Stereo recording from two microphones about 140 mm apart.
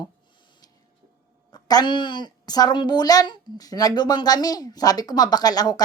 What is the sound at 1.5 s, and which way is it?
A woman's voice, 25° left (ahead or behind).